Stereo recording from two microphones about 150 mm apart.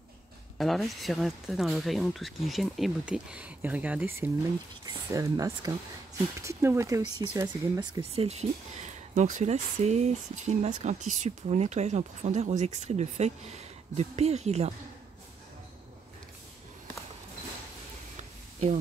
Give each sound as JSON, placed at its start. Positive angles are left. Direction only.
{"t": 0.6, "sound": "speech", "side_deg": 0}
{"t": 4.8, "sound": "speech", "side_deg": -25}
{"t": 7.0, "sound": "speech", "side_deg": -30}
{"t": 8.0, "sound": "speech", "side_deg": -40}